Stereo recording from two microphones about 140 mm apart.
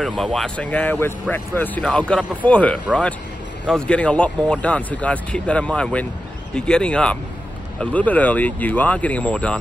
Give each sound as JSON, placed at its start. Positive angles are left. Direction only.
{"t": 0.0, "sound": "speech", "side_deg": 0}